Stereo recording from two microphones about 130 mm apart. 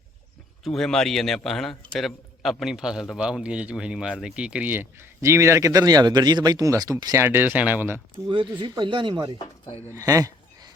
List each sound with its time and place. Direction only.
0.6 s a man's voice: 5° left (ahead or behind); by 8.0 s 15° right (ahead or behind)
8.3 s speech: 35° right (ahead or behind)
9.9 s a sound: 25° right (ahead or behind)